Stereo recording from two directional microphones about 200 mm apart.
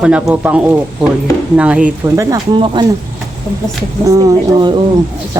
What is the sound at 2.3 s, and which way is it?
Speech, 20° right (ahead or behind).